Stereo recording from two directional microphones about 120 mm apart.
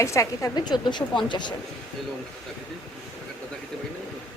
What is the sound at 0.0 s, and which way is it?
A woman's voice, 25° left (ahead or behind).